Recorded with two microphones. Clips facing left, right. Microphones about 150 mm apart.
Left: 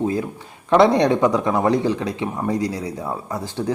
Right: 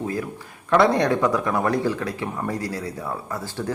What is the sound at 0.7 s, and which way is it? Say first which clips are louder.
Speech: left 3 dB; 20° left (ahead or behind).